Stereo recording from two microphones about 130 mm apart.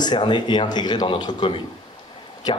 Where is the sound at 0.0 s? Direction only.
35° left (ahead or behind).